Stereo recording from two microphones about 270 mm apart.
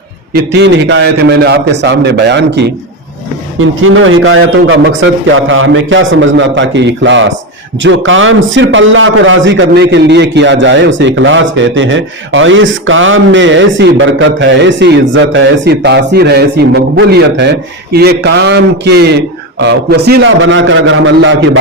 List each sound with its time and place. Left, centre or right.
0.3 s a man's voice: right